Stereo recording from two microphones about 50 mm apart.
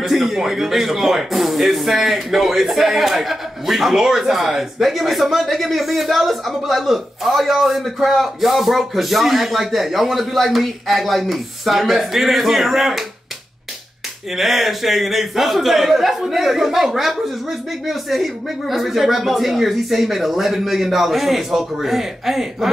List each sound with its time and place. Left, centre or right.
0.0 s speech: centre
14.3 s speech: centre